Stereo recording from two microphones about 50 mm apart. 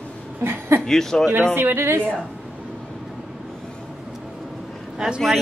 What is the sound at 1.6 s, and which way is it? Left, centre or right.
Speech, right.